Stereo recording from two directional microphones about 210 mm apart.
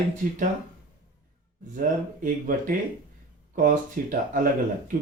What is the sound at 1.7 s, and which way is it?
Speech, 40° right (ahead or behind).